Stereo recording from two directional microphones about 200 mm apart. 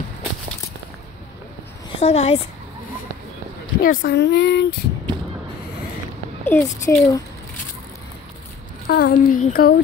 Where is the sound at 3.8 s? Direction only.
45° left (ahead or behind).